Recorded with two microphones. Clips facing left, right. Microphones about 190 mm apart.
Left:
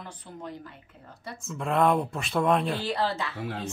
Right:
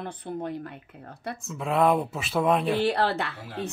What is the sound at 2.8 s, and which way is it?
Speech, 65° right (ahead or behind).